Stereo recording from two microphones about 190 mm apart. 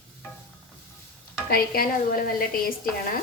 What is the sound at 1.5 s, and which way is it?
A woman's voice, 50° left (ahead or behind).